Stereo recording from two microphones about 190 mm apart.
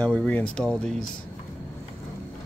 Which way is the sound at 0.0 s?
5° left (ahead or behind).